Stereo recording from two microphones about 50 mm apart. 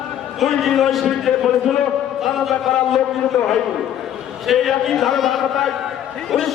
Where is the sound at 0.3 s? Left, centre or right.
Centre.